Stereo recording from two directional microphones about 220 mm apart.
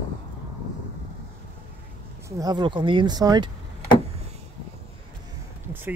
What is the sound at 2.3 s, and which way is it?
Speech, 15° right (ahead or behind).